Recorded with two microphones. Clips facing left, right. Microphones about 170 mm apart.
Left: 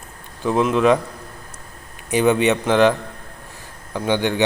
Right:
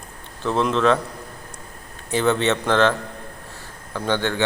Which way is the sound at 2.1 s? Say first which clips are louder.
Left 3 dB; 15° left (ahead or behind).